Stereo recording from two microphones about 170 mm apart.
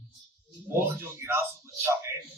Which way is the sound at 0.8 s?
15° right (ahead or behind).